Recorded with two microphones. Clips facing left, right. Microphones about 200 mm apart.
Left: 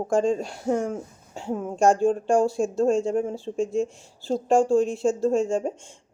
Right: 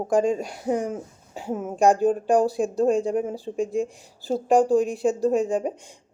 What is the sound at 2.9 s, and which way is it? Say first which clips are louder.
Speech: even; 15° right (ahead or behind).